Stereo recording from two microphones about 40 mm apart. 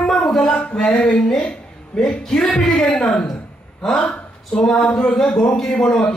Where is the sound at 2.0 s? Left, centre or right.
Centre.